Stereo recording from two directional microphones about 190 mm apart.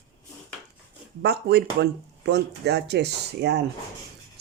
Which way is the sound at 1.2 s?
60° right (ahead or behind).